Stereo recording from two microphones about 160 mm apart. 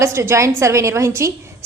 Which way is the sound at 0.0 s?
20° right (ahead or behind).